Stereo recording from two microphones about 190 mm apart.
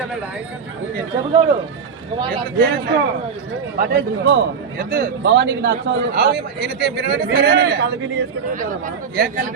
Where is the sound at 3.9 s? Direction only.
65° right (ahead or behind).